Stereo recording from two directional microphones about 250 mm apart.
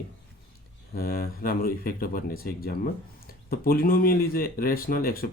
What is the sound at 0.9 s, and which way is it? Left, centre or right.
Speech, left.